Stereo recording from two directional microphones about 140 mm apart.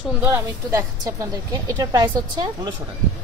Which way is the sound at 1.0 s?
25° right (ahead or behind).